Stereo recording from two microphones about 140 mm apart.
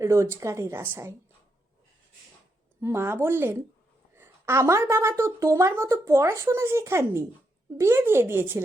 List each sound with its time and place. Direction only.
0.0 s a woman's voice: 20° right (ahead or behind)
2.8 s a woman's voice: 20° right (ahead or behind)